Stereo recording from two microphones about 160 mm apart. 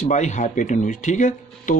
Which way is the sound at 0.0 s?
50° left (ahead or behind).